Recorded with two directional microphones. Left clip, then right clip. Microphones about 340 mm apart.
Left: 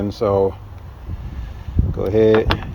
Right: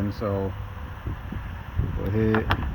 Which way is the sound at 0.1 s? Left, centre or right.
Left.